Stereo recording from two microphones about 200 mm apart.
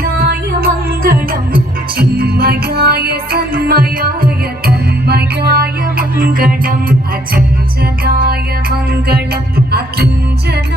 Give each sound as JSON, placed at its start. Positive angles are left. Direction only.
{"t": 0.0, "sound": "music", "side_deg": -50}
{"t": 8.0, "sound": "music", "side_deg": -50}